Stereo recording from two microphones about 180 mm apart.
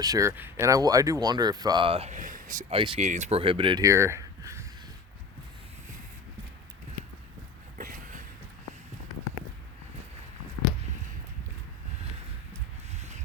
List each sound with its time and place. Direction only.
0.0 s speech: 20° right (ahead or behind); by 2.7 s 45° right (ahead or behind)
2.7 s speech: 30° right (ahead or behind)
7.8 s a sound: 50° right (ahead or behind)